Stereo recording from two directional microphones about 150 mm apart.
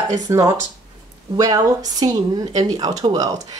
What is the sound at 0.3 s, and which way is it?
Speech, 20° right (ahead or behind).